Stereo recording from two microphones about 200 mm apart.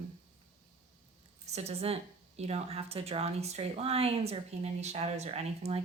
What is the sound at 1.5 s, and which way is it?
A woman's voice, 30° right (ahead or behind).